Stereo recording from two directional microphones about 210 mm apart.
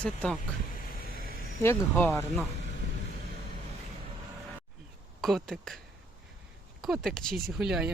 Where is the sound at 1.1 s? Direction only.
45° left (ahead or behind).